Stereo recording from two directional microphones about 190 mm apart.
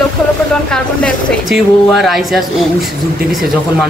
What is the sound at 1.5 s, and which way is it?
Speech, centre (ahead or behind).